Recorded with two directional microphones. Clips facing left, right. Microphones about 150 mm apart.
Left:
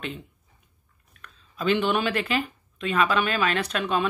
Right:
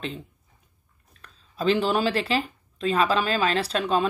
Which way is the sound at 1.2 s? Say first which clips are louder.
Right 3 dB; 35° right (ahead or behind).